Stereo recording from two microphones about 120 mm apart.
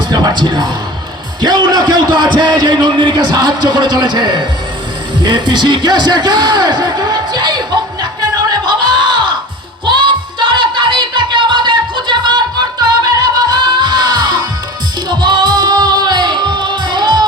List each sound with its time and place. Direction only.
0.1 s a man's voice: 35° right (ahead or behind)
8.2 s music: 35° right (ahead or behind)